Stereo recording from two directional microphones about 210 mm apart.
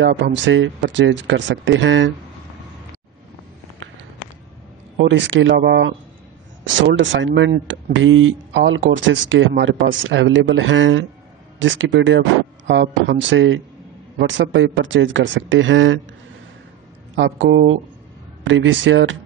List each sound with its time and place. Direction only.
0.0 s speech: 65° right (ahead or behind)
4.9 s speech: 60° right (ahead or behind)
12.6 s speech: 50° right (ahead or behind)
17.1 s speech: 60° right (ahead or behind)